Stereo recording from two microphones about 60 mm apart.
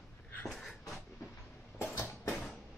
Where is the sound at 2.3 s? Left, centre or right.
Centre.